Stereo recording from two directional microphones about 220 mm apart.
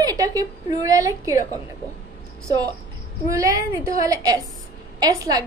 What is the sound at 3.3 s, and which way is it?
A woman's voice, 15° right (ahead or behind).